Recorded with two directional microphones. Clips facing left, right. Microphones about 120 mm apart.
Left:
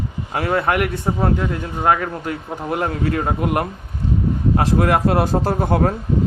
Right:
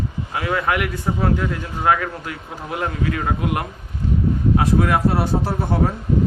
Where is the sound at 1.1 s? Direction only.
25° left (ahead or behind).